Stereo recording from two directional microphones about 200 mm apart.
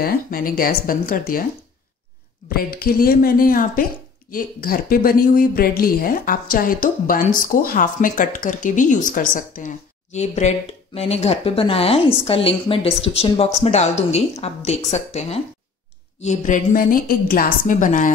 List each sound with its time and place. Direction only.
0.0 s speech: 45° left (ahead or behind)
2.5 s speech: 45° left (ahead or behind)